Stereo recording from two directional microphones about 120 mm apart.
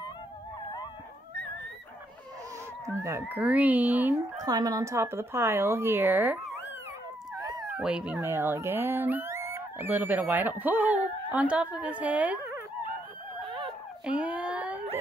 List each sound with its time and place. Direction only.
2.9 s speech: 25° right (ahead or behind)
4.4 s speech: 30° right (ahead or behind); by 6.4 s 15° right (ahead or behind)
7.7 s speech: 5° right (ahead or behind)
8.2 s speech: 20° right (ahead or behind)
14.0 s a sound: 10° right (ahead or behind)